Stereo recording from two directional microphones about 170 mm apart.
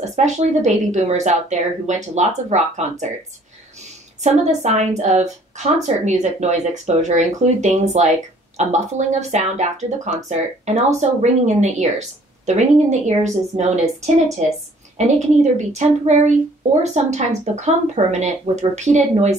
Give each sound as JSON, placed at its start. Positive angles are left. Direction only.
{"t": 0.0, "sound": "a woman's voice", "side_deg": -45}
{"t": 4.2, "sound": "a woman's voice", "side_deg": -40}